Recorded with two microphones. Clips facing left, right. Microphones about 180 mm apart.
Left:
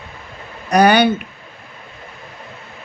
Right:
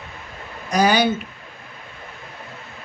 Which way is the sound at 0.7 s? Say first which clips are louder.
Left 5 dB; 60° left (ahead or behind).